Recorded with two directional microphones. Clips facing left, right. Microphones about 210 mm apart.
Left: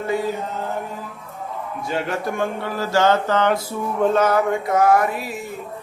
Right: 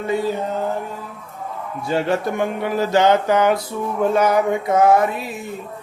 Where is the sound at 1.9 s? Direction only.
25° right (ahead or behind).